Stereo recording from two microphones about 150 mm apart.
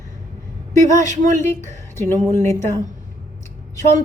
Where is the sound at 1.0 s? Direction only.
55° right (ahead or behind).